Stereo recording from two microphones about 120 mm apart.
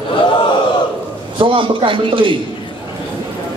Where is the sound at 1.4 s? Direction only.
45° right (ahead or behind).